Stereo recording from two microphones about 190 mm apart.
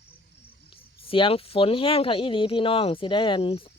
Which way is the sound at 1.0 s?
30° left (ahead or behind).